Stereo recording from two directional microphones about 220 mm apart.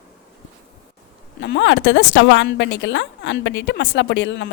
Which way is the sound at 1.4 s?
55° left (ahead or behind).